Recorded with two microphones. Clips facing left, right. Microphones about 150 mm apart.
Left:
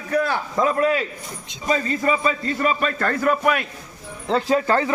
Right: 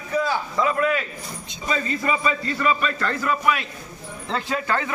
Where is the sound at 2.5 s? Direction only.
45° left (ahead or behind).